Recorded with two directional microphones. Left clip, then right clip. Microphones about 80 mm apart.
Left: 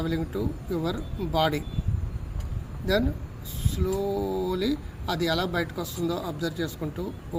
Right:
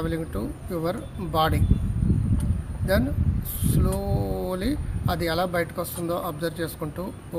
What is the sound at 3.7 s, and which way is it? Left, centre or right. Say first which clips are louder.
A man's voice: left 1 dB; right.